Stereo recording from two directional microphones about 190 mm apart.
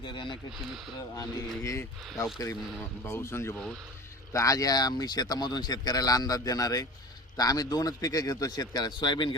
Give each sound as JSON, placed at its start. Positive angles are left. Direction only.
{"t": 0.0, "sound": "speech", "side_deg": 25}
{"t": 1.6, "sound": "speech", "side_deg": 15}